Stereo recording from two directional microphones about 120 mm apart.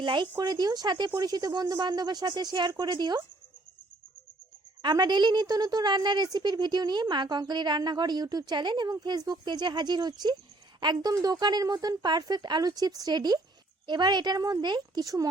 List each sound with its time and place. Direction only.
0.0 s a woman's voice: 40° right (ahead or behind)
4.8 s a woman's voice: 35° right (ahead or behind)